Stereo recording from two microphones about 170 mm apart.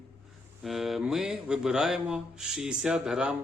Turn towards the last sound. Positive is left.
turn(degrees=-5)  # may be behind; listen again after turning